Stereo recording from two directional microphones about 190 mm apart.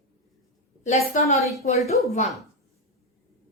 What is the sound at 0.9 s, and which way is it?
Speech, 35° left (ahead or behind).